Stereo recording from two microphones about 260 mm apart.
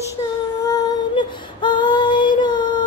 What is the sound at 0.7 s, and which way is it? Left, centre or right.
Female singing, centre.